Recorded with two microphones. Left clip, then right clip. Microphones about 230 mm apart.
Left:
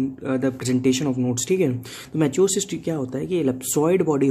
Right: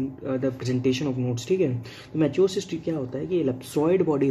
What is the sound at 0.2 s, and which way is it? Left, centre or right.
Speech, left.